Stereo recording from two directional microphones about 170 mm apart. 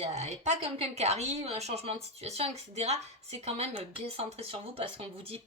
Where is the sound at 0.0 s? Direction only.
40° right (ahead or behind).